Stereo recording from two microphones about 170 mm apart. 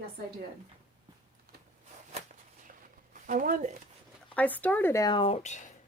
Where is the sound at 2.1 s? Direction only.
45° right (ahead or behind).